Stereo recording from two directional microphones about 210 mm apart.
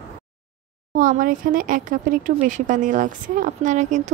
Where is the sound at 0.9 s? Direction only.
40° right (ahead or behind).